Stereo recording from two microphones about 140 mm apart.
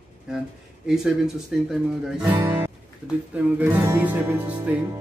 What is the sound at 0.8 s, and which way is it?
Speech, 5° right (ahead or behind).